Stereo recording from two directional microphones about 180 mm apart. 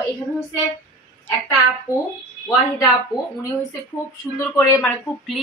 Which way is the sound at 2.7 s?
20° left (ahead or behind).